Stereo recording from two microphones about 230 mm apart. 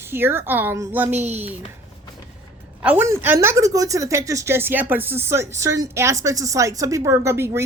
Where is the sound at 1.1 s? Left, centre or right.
Right.